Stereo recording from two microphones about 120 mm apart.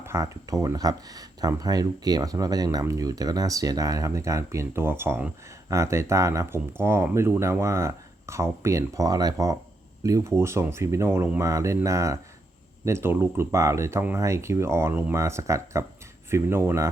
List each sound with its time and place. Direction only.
0.0 s speech: 25° right (ahead or behind)